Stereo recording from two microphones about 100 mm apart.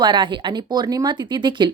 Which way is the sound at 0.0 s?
50° right (ahead or behind).